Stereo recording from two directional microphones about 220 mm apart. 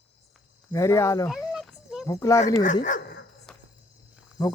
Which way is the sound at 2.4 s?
35° left (ahead or behind).